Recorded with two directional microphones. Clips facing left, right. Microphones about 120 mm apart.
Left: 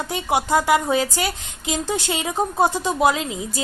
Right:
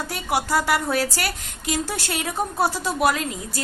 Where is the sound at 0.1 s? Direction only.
20° left (ahead or behind).